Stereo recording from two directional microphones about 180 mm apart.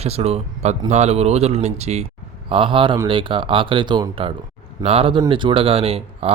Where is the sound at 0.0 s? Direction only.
35° right (ahead or behind).